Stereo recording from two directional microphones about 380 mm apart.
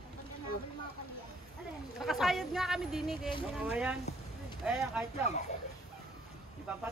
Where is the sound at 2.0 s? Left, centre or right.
Centre.